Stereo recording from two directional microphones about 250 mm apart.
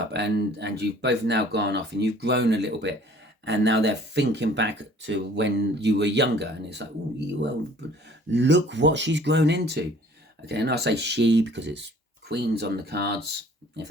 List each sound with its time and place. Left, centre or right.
0.0 s speech: right